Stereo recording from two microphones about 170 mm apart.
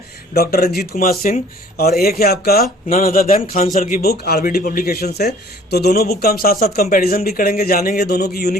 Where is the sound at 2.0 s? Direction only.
65° left (ahead or behind).